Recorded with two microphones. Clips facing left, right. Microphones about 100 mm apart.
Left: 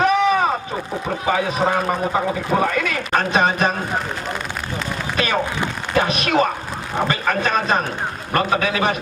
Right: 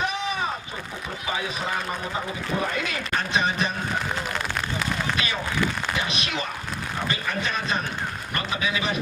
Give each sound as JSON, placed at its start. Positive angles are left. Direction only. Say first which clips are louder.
{"t": 0.0, "sound": "a sound", "louder": "left 11 dB", "side_deg": 55}
{"t": 1.3, "sound": "a man's voice", "louder": "left 10 dB", "side_deg": 55}
{"t": 5.1, "sound": "a man's voice", "louder": "left 6 dB", "side_deg": 55}